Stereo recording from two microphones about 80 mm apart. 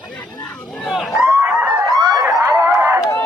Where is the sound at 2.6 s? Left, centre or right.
Right.